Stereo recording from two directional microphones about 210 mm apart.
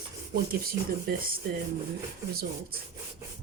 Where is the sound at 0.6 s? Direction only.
45° right (ahead or behind).